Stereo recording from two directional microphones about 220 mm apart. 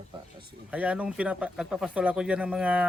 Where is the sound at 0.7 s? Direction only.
5° right (ahead or behind).